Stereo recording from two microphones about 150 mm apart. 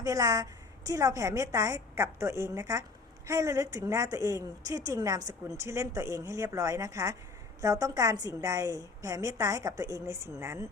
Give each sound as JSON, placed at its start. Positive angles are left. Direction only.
{"t": 0.0, "sound": "a woman's voice", "side_deg": -25}